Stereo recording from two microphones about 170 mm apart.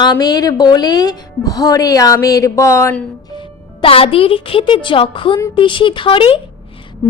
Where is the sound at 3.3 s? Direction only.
30° left (ahead or behind).